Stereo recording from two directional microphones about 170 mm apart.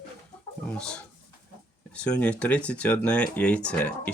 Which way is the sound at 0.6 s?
5° left (ahead or behind).